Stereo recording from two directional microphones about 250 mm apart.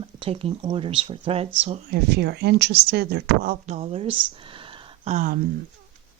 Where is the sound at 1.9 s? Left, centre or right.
Right.